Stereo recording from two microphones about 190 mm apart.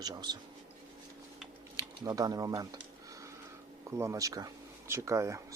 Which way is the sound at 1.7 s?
20° right (ahead or behind).